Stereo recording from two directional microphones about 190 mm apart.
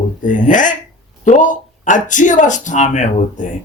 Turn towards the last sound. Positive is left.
turn(degrees=40)  # may be behind; listen again after turning